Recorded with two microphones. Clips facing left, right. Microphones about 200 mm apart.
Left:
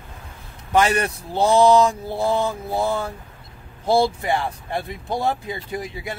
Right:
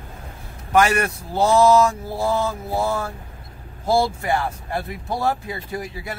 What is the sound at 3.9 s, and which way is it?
Speech, 20° left (ahead or behind).